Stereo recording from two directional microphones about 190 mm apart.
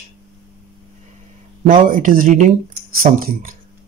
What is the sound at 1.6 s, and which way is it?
Speech, 45° right (ahead or behind).